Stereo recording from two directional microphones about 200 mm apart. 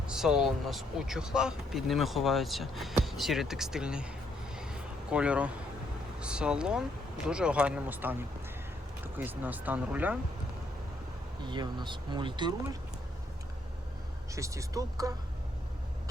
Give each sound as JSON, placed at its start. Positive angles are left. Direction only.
{"t": 0.1, "sound": "speech", "side_deg": 0}
{"t": 4.5, "sound": "a sound", "side_deg": -5}
{"t": 6.1, "sound": "speech", "side_deg": -5}
{"t": 9.1, "sound": "speech", "side_deg": -10}
{"t": 11.4, "sound": "speech", "side_deg": -20}
{"t": 14.3, "sound": "speech", "side_deg": -15}